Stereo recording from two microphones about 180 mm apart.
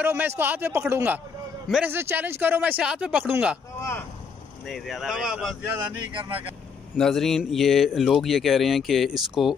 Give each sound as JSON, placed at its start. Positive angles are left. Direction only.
{"t": 0.0, "sound": "speech", "side_deg": -10}
{"t": 4.6, "sound": "speech", "side_deg": 0}
{"t": 6.1, "sound": "speech", "side_deg": -25}
{"t": 7.0, "sound": "speech", "side_deg": 0}